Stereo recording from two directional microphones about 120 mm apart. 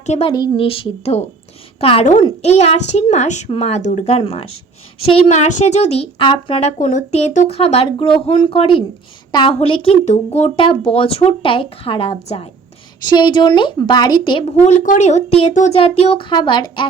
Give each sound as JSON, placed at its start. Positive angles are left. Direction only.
{"t": 0.0, "sound": "a woman's voice", "side_deg": 70}
{"t": 0.3, "sound": "a woman's voice", "side_deg": 35}
{"t": 0.5, "sound": "a child's voice", "side_deg": 50}
{"t": 4.0, "sound": "speech", "side_deg": 55}
{"t": 5.1, "sound": "speech", "side_deg": 70}
{"t": 6.6, "sound": "speech", "side_deg": 65}
{"t": 10.1, "sound": "a child's voice", "side_deg": 65}
{"t": 10.5, "sound": "speech", "side_deg": 45}
{"t": 13.1, "sound": "a woman's voice", "side_deg": 40}
{"t": 14.4, "sound": "a child's voice", "side_deg": 70}
{"t": 15.8, "sound": "speech", "side_deg": 55}
{"t": 16.3, "sound": "a woman's voice", "side_deg": 40}